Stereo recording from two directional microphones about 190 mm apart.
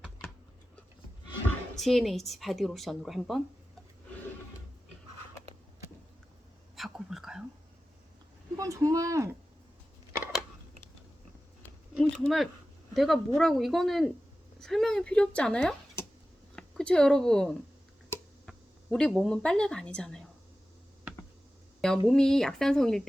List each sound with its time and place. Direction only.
1.7 s a woman's voice: centre (ahead or behind)
6.7 s whispering: centre (ahead or behind)
8.5 s speech: 15° right (ahead or behind)
11.9 s a sound: centre (ahead or behind)
12.9 s a woman's voice: centre (ahead or behind)
21.8 s a woman's voice: 5° left (ahead or behind)